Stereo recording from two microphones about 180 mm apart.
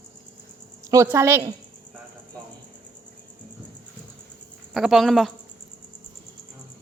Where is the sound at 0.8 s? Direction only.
20° right (ahead or behind).